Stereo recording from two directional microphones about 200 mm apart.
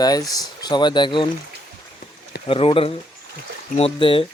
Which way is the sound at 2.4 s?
30° left (ahead or behind).